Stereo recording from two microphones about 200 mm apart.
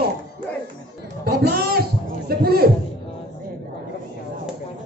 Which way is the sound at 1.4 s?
50° right (ahead or behind).